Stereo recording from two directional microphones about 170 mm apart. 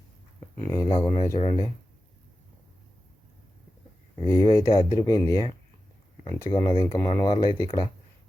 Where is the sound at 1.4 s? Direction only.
40° left (ahead or behind).